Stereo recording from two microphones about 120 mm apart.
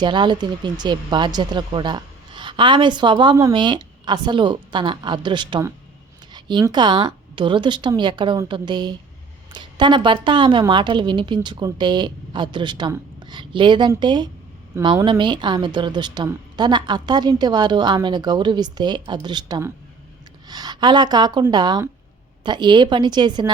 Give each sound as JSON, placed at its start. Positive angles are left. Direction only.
{"t": 0.0, "sound": "a woman's voice", "side_deg": -40}